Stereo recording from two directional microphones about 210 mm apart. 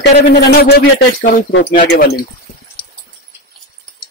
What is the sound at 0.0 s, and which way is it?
Speech, 50° left (ahead or behind).